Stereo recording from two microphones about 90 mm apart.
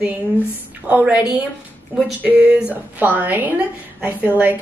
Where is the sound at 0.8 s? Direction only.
15° right (ahead or behind).